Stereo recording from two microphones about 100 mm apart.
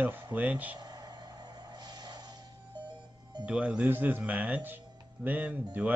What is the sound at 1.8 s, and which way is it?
Music, 45° right (ahead or behind).